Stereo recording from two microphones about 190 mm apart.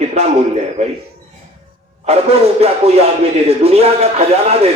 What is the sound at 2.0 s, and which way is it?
Speech, 35° right (ahead or behind).